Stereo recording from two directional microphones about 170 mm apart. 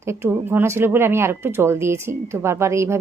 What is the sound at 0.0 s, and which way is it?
A woman's voice, 15° right (ahead or behind).